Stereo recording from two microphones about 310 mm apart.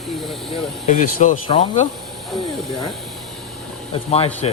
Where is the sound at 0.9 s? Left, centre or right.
Left.